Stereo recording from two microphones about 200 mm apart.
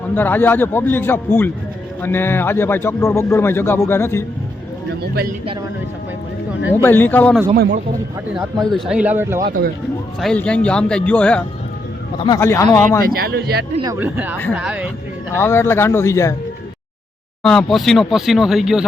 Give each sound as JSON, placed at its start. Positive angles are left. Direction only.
{"t": 0.1, "sound": "a man's voice", "side_deg": 10}
{"t": 6.8, "sound": "a man's voice", "side_deg": 10}
{"t": 7.5, "sound": "speech", "side_deg": -45}
{"t": 8.3, "sound": "speech", "side_deg": 0}
{"t": 9.4, "sound": "speech", "side_deg": -45}
{"t": 10.2, "sound": "speech", "side_deg": 5}
{"t": 12.2, "sound": "a man's voice", "side_deg": 15}
{"t": 13.1, "sound": "speech", "side_deg": -50}
{"t": 13.8, "sound": "speech", "side_deg": -10}
{"t": 15.4, "sound": "a man's voice", "side_deg": 10}
{"t": 17.4, "sound": "speech", "side_deg": 5}